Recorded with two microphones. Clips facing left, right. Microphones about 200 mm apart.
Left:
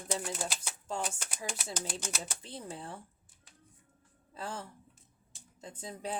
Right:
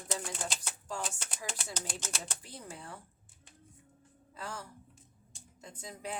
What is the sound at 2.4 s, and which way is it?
Speech, 25° left (ahead or behind).